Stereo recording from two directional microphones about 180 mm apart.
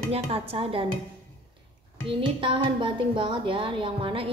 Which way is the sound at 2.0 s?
30° right (ahead or behind).